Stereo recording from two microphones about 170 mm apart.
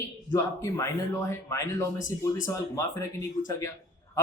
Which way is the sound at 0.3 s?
15° left (ahead or behind).